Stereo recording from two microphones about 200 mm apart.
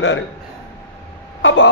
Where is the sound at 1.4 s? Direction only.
70° left (ahead or behind).